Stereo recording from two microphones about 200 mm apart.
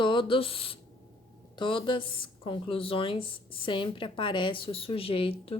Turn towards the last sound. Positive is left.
turn(degrees=30)  # may be behind; listen again after turning